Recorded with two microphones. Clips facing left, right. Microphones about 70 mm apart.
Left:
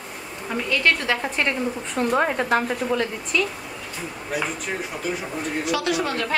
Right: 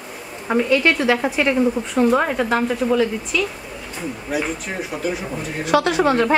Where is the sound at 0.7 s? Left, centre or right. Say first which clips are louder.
Right 3 dB; centre.